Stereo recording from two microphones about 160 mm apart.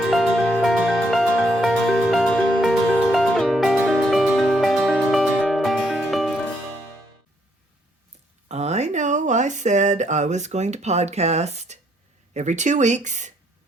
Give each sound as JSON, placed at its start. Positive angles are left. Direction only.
{"t": 0.1, "sound": "music", "side_deg": 0}
{"t": 8.4, "sound": "a sound", "side_deg": -45}
{"t": 12.3, "sound": "speech", "side_deg": -45}